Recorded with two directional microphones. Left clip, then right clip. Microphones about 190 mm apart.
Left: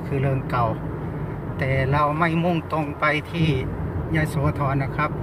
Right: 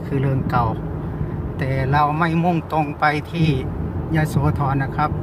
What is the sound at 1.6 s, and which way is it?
A man's voice, 15° right (ahead or behind).